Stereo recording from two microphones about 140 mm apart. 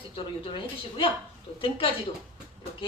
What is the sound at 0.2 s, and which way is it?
Speech, 40° left (ahead or behind).